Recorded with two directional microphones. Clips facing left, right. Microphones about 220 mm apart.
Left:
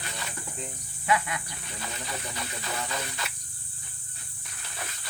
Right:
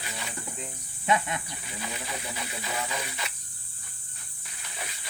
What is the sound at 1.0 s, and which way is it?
Speech, 25° right (ahead or behind).